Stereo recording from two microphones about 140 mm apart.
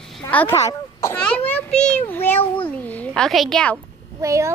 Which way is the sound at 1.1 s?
10° left (ahead or behind).